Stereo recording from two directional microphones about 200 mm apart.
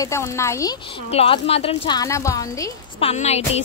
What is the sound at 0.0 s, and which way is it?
Speech, 15° left (ahead or behind).